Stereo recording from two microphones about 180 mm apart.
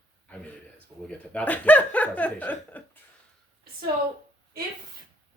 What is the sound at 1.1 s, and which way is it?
Speech, 10° left (ahead or behind).